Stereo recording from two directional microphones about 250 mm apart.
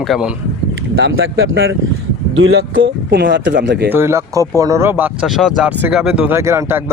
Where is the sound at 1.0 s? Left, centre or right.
Right.